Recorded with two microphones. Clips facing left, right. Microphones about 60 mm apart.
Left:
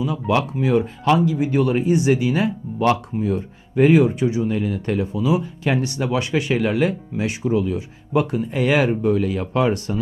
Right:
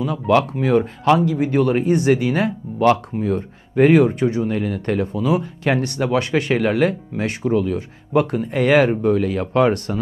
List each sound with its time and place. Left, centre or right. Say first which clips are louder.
0.0 s speech: right 3 dB; right